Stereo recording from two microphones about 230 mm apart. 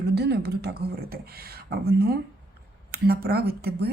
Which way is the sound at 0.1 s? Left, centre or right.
Right.